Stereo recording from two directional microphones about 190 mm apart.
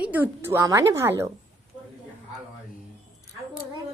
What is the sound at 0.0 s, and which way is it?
A woman's voice, 10° right (ahead or behind).